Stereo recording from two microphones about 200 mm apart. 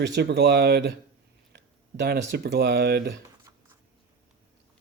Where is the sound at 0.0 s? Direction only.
55° right (ahead or behind).